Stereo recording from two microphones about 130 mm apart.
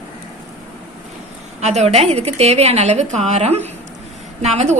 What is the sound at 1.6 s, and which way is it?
A woman's voice, 55° right (ahead or behind).